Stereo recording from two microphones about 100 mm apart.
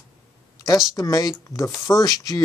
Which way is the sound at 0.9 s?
35° left (ahead or behind).